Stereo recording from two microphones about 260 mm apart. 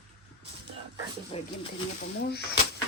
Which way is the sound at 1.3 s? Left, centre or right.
Left.